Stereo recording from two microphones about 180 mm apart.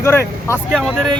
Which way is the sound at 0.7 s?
Centre (ahead or behind).